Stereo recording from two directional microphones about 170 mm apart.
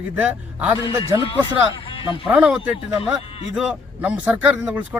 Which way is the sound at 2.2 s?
5° right (ahead or behind).